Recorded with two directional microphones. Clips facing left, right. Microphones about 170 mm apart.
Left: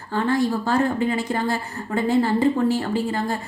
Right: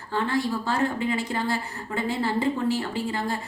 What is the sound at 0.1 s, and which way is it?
A woman's voice, 45° left (ahead or behind).